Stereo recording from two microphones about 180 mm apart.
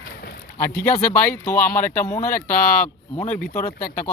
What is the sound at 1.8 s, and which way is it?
Speech, 15° left (ahead or behind).